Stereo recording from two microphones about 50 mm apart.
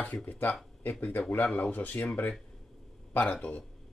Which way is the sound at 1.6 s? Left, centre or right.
Left.